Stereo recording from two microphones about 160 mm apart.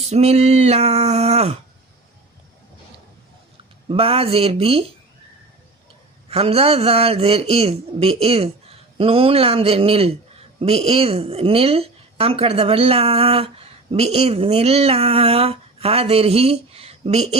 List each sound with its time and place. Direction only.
0.1 s speech: 40° right (ahead or behind)
3.8 s speech: 35° right (ahead or behind)
6.2 s speech: 40° right (ahead or behind)